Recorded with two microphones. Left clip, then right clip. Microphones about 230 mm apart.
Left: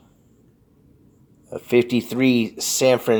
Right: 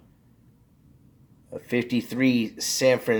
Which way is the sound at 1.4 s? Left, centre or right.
Left.